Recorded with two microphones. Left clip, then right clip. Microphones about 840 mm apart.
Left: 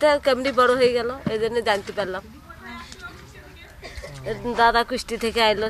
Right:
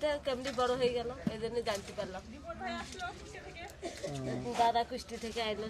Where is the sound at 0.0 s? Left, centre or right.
Left.